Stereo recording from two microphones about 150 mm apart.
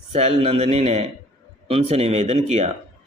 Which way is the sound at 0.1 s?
45° right (ahead or behind).